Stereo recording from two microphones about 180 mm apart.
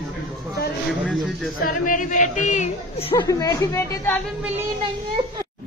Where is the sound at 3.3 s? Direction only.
20° left (ahead or behind).